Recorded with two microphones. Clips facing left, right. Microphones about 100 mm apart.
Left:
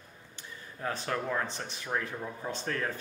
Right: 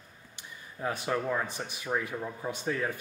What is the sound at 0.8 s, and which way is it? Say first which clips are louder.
Speech: right 2 dB; 10° right (ahead or behind).